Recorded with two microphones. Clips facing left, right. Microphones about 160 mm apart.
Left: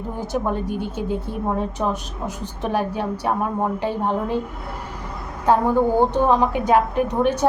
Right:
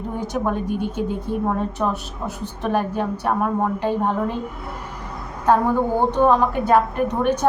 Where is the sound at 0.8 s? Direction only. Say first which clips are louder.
Right 1 dB; 55° right (ahead or behind).